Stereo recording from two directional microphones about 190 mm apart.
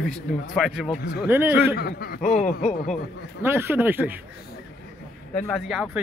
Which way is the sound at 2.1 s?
40° left (ahead or behind).